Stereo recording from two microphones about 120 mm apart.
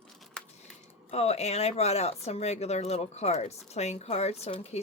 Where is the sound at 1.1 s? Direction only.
60° left (ahead or behind).